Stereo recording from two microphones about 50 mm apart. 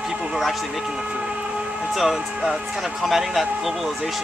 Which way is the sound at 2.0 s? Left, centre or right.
Centre.